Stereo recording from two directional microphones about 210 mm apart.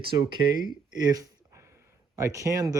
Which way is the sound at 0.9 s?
20° right (ahead or behind).